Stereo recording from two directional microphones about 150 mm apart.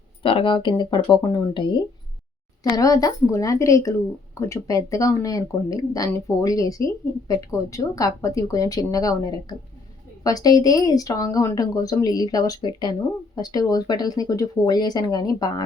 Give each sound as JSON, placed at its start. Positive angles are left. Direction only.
{"t": 0.2, "sound": "speech", "side_deg": 35}